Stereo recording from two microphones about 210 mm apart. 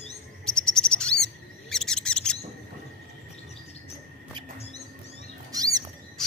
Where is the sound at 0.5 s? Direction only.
5° left (ahead or behind).